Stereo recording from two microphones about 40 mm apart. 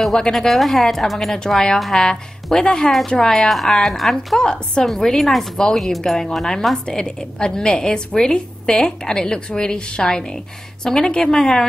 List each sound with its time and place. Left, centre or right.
0.3 s a woman's voice: centre
1.5 s a woman's voice: centre
3.4 s a woman's voice: centre
4.4 s a woman's voice: left
4.8 s a woman's voice: centre